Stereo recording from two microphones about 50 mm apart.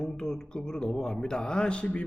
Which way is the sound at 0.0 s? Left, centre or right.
Centre.